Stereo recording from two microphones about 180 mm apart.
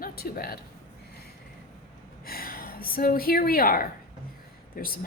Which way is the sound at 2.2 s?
55° left (ahead or behind).